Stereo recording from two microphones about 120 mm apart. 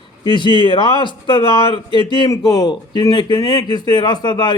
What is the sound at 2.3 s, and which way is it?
A man's voice, 30° left (ahead or behind).